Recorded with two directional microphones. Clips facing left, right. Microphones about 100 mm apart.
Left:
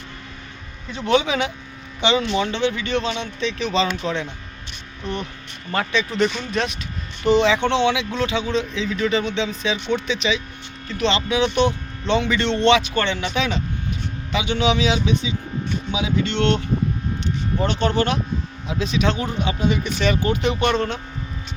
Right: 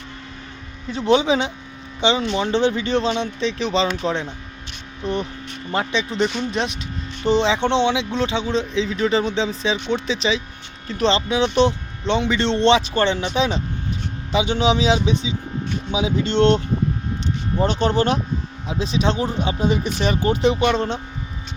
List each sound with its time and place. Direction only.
0.9 s speech: 25° right (ahead or behind)
5.7 s speech: 20° right (ahead or behind); by 16.6 s 40° right (ahead or behind)
17.6 s speech: 35° right (ahead or behind)
20.5 s speech: 5° right (ahead or behind)